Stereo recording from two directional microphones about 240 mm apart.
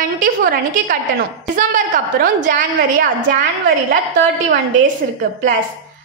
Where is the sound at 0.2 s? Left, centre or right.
Right.